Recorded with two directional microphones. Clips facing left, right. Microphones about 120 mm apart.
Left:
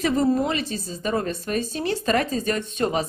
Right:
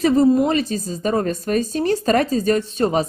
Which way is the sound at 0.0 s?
35° right (ahead or behind).